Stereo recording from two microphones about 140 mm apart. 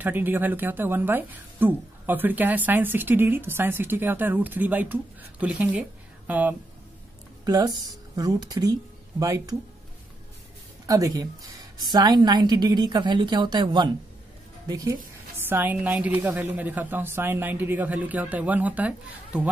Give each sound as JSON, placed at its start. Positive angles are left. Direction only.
{"t": 0.0, "sound": "speech", "side_deg": -15}
{"t": 7.4, "sound": "speech", "side_deg": -30}
{"t": 10.9, "sound": "a woman's voice", "side_deg": -25}
{"t": 15.4, "sound": "speech", "side_deg": -15}